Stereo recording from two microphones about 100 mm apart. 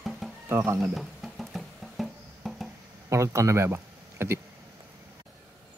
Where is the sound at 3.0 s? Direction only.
30° right (ahead or behind).